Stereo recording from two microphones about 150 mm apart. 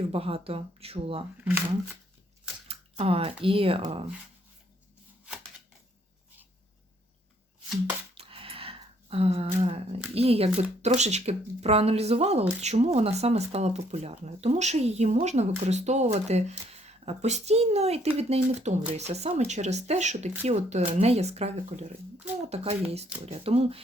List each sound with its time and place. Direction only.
0.0 s speech: 40° right (ahead or behind)
2.6 s speech: 40° right (ahead or behind)
8.1 s a sound: 40° right (ahead or behind)
10.2 s speech: 40° right (ahead or behind)